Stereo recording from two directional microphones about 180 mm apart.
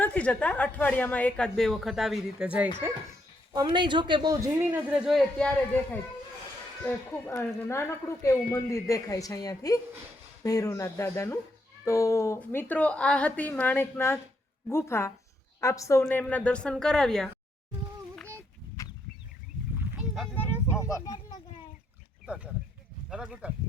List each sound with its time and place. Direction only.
0.0 s speech: 10° left (ahead or behind)
3.5 s speech: 25° right (ahead or behind)
4.9 s a man's voice: 5° right (ahead or behind)
18.8 s bird: 20° left (ahead or behind)
19.8 s a sound: centre (ahead or behind); by 21.3 s 20° left (ahead or behind)
23.0 s speech: 5° right (ahead or behind)